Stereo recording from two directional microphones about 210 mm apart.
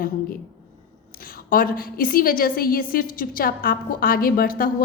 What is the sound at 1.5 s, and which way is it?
A woman's voice, 45° left (ahead or behind).